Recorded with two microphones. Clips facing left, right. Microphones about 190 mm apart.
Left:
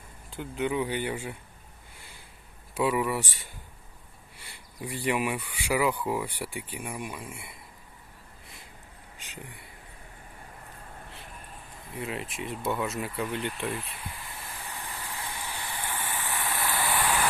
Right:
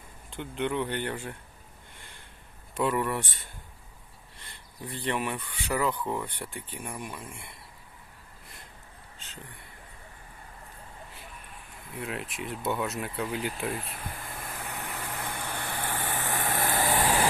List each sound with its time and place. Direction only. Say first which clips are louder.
0.3 s speech: left 1 dB; 5° left (ahead or behind)
2.0 s a sound: left 1 dB; 5° left (ahead or behind)
2.7 s speech: left 1 dB; 5° left (ahead or behind)
4.4 s speech: left 3 dB; 10° left (ahead or behind)
9.1 s a sound: left 3 dB; 10° left (ahead or behind)
11.9 s speech: left 1 dB; centre (ahead or behind)
13.9 s vehicle: right 2 dB; 50° right (ahead or behind)